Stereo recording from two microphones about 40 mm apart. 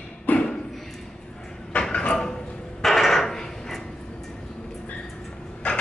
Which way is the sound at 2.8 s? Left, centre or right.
Centre.